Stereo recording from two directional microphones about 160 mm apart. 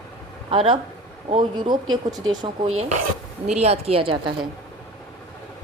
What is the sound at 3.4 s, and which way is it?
Speech, 40° right (ahead or behind).